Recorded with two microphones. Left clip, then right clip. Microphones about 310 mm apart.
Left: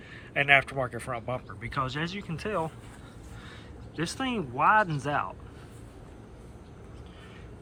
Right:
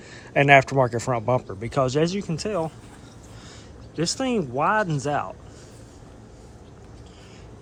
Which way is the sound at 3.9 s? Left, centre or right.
Centre.